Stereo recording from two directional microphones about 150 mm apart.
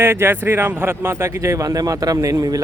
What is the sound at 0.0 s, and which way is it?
Speech, 15° right (ahead or behind).